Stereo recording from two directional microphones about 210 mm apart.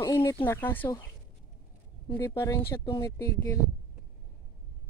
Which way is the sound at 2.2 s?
15° left (ahead or behind).